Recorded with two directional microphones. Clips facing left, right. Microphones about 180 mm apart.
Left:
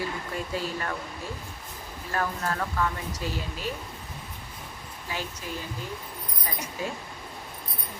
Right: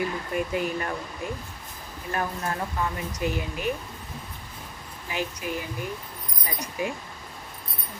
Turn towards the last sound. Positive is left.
turn(degrees=-15)  # may be behind; listen again after turning